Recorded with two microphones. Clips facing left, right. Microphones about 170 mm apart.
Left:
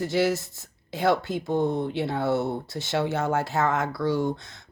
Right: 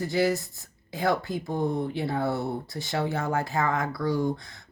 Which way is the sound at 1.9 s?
70° left (ahead or behind).